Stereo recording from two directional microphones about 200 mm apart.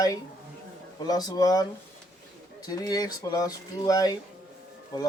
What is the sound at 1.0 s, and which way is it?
Speech, 20° left (ahead or behind).